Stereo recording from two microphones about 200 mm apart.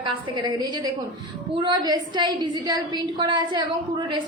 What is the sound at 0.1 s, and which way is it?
A woman's voice, 20° right (ahead or behind).